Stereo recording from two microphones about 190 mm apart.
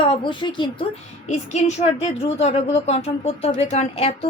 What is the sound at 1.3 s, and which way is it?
Speech, 35° left (ahead or behind).